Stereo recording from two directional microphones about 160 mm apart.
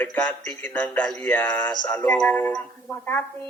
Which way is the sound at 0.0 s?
10° left (ahead or behind).